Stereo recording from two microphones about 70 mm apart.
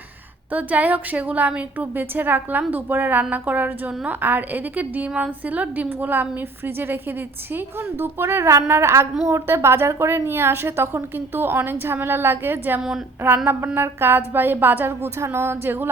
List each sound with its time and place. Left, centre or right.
0.5 s a woman's voice: right